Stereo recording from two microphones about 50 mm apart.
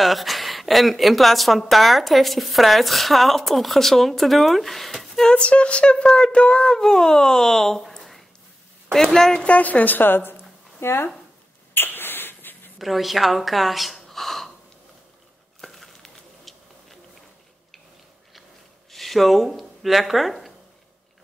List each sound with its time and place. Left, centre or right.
0.0 s speech: centre
5.3 s speech: left
9.4 s a woman's voice: left
11.7 s a sound: left
12.7 s speech: centre
15.6 s a sound: centre
18.9 s speech: centre